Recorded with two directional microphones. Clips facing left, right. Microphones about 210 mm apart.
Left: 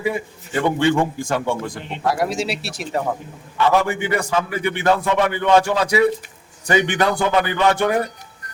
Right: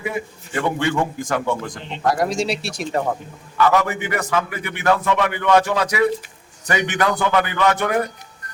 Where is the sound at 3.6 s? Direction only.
30° left (ahead or behind).